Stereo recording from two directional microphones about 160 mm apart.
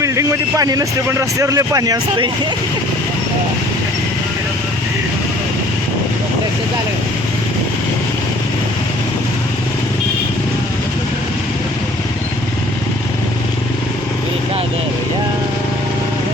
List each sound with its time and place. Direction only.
0.0 s speech: 20° right (ahead or behind)